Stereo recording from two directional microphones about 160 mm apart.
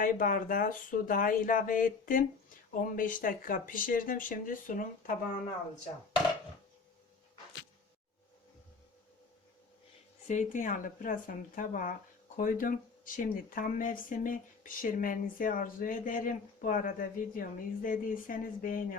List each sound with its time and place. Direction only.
0.0 s speech: 60° left (ahead or behind)
10.2 s speech: 50° left (ahead or behind)